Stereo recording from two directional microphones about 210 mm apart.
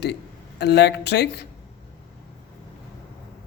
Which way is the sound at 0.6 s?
55° left (ahead or behind).